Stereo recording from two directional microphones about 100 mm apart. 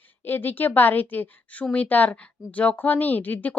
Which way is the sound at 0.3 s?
20° left (ahead or behind).